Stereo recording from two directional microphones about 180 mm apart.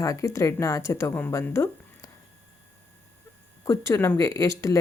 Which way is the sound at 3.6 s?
15° left (ahead or behind).